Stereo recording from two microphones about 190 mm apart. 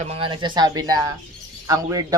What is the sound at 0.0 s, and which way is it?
Speech, 30° right (ahead or behind).